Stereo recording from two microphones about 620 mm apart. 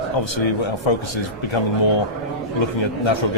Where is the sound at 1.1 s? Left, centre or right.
Left.